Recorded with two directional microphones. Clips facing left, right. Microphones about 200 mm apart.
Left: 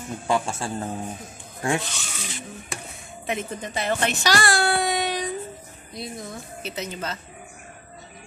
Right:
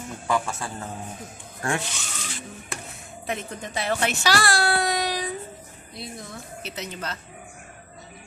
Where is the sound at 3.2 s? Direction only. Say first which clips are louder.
Left 2 dB; centre (ahead or behind).